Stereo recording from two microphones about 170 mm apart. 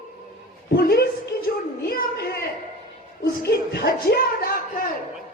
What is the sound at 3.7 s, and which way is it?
A man's voice, 70° left (ahead or behind).